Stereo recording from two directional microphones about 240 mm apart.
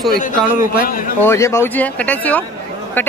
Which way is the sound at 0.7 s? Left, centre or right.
Left.